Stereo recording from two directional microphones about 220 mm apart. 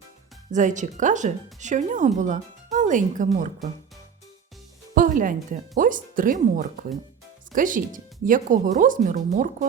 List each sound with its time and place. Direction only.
0.5 s speech: 35° right (ahead or behind)
4.9 s speech: 40° right (ahead or behind)